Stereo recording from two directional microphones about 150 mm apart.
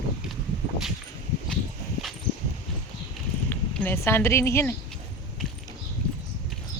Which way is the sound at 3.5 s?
15° left (ahead or behind).